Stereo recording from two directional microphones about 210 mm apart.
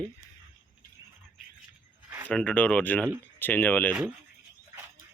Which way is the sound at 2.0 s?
10° right (ahead or behind).